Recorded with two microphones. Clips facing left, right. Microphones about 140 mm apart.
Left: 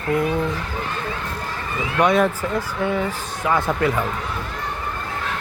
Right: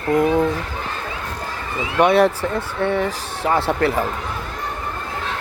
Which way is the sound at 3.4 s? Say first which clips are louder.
Right 2 dB; 35° right (ahead or behind).